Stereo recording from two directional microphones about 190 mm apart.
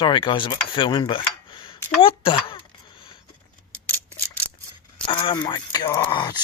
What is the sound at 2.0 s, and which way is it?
Speech, 30° left (ahead or behind).